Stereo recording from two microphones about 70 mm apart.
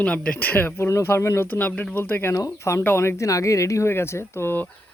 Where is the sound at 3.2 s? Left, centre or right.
Left.